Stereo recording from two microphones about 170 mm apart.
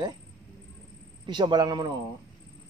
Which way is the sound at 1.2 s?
25° right (ahead or behind).